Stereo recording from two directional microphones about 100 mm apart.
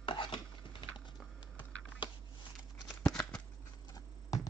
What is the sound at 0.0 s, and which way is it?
Rub, 55° left (ahead or behind).